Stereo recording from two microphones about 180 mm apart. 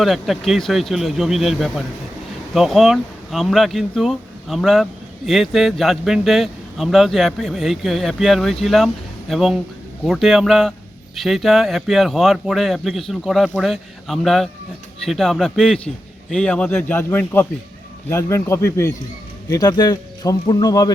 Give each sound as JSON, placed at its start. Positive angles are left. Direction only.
{"t": 0.0, "sound": "a man's voice", "side_deg": 0}